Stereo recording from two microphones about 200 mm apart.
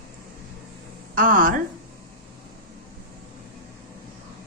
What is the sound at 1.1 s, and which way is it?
Speech, 45° right (ahead or behind).